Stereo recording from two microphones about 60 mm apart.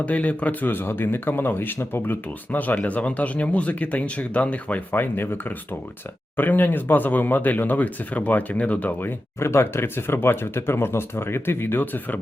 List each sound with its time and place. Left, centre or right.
0.0 s speech: left
0.7 s speech: left